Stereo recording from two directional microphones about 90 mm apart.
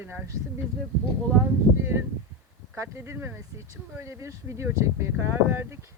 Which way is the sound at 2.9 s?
25° right (ahead or behind).